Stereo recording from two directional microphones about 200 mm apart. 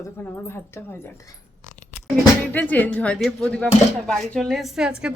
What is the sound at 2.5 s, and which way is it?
Speech, 10° left (ahead or behind).